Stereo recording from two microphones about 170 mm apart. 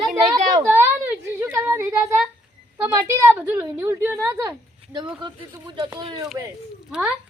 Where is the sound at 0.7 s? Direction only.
15° right (ahead or behind).